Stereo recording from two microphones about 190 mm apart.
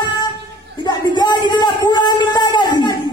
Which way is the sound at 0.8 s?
20° left (ahead or behind).